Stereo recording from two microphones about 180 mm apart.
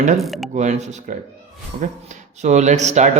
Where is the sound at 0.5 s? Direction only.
40° right (ahead or behind).